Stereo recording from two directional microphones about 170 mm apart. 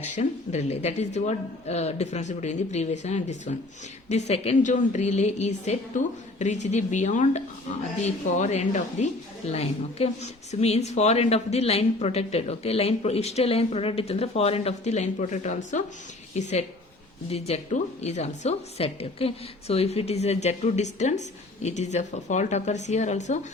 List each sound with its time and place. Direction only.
0.0 s a woman's voice: 40° left (ahead or behind)